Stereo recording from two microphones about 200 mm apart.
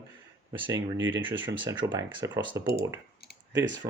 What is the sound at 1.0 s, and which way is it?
Speech, 70° right (ahead or behind).